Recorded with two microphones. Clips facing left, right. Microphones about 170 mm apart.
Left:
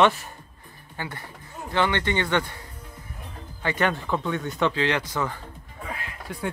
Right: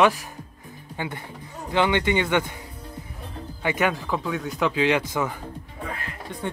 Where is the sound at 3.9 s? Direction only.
Centre (ahead or behind).